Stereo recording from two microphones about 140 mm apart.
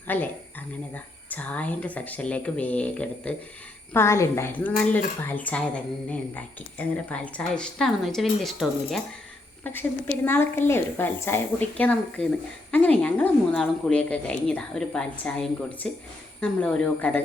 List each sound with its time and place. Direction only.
0.1 s a woman's voice: 15° left (ahead or behind)
10.2 s a woman's voice: 15° left (ahead or behind)